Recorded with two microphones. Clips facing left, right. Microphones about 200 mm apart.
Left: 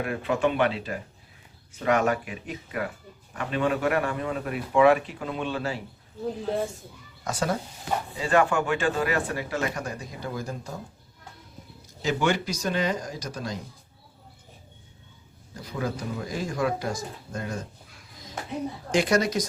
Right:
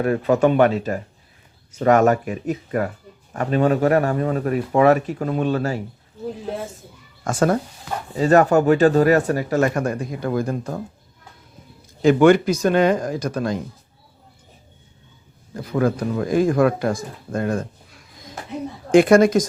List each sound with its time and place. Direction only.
0.0 s speech: 40° right (ahead or behind)
6.4 s speech: centre (ahead or behind)
7.3 s speech: 55° right (ahead or behind)
8.2 s speech: 40° right (ahead or behind)
12.0 s speech: 55° right (ahead or behind)
15.5 s speech: 55° right (ahead or behind)
18.9 s speech: 55° right (ahead or behind)